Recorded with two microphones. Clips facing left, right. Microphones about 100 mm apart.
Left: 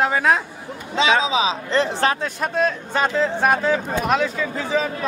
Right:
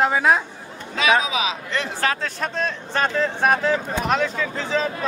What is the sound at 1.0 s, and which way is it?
Speech, 25° left (ahead or behind).